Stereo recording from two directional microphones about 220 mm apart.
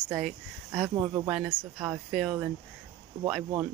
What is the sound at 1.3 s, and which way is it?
Speech, centre (ahead or behind).